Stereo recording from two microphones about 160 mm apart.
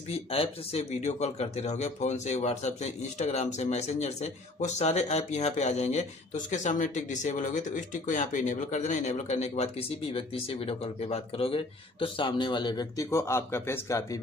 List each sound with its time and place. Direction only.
0.1 s speech: 40° left (ahead or behind); by 14.2 s 20° left (ahead or behind)